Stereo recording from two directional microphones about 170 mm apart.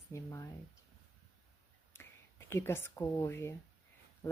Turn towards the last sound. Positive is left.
turn(degrees=15)  # may be behind; listen again after turning